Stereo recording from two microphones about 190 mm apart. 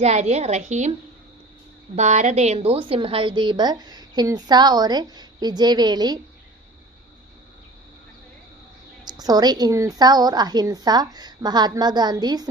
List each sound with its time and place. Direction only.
0.0 s a woman's voice: 35° right (ahead or behind)
2.0 s a woman's voice: 35° right (ahead or behind); by 6.1 s 20° right (ahead or behind)
9.0 s a woman's voice: 20° right (ahead or behind)